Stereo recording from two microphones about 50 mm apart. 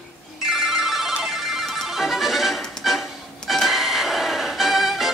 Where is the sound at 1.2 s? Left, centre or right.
Centre.